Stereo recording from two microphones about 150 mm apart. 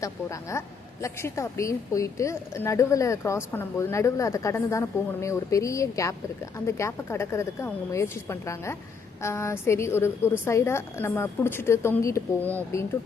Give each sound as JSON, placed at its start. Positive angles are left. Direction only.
{"t": 0.0, "sound": "a woman's voice", "side_deg": 20}